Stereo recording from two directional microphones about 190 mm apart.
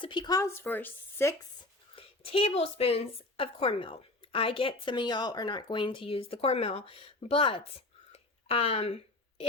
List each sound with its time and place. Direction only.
0.0 s speech: 25° left (ahead or behind)
2.0 s a woman's voice: 30° left (ahead or behind)
8.1 s a sound: 30° left (ahead or behind)